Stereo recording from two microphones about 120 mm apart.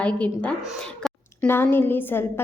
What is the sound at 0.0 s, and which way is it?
A child's voice, 10° left (ahead or behind).